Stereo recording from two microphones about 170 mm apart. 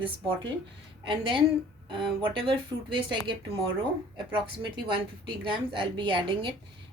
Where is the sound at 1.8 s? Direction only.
30° right (ahead or behind).